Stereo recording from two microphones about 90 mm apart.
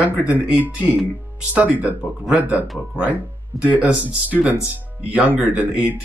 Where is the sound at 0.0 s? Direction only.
15° right (ahead or behind).